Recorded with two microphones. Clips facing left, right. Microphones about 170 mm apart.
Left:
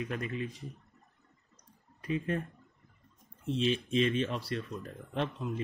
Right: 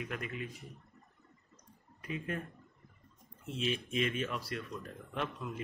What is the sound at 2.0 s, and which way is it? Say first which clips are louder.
Speech: left 6 dB; 30° left (ahead or behind).